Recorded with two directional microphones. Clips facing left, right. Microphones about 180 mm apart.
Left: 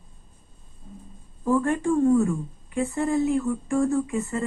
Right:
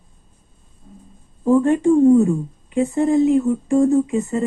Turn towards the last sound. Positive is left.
turn(degrees=-20)  # may be behind; listen again after turning